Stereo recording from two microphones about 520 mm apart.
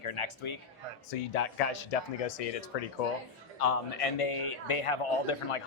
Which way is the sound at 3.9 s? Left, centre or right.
Left.